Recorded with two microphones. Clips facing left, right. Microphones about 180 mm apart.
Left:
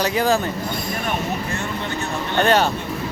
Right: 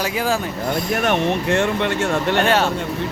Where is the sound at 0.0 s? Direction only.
5° right (ahead or behind).